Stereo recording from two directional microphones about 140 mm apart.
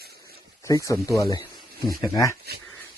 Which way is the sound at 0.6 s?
25° left (ahead or behind).